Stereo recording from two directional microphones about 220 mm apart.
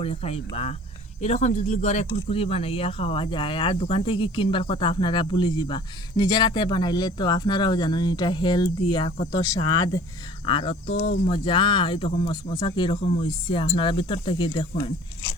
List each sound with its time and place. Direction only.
0.0 s speech: 25° left (ahead or behind)